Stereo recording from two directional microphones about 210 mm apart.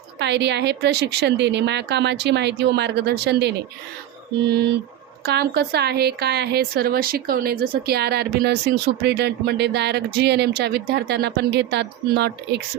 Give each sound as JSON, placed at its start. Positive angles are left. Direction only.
{"t": 0.2, "sound": "speech", "side_deg": -55}
{"t": 5.2, "sound": "speech", "side_deg": -50}